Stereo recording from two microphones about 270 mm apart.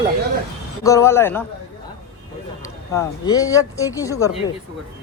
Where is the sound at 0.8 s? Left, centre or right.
Centre.